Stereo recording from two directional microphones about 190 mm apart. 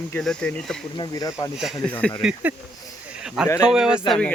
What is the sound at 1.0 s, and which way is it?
Speech, 20° left (ahead or behind).